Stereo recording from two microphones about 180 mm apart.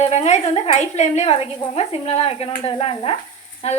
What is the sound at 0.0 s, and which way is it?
A woman's voice, 40° left (ahead or behind).